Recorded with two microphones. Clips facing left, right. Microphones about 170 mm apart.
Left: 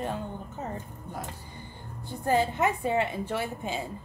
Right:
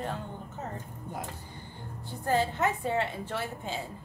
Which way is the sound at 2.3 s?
15° left (ahead or behind).